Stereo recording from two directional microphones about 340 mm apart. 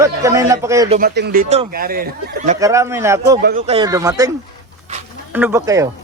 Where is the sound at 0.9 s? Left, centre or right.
Right.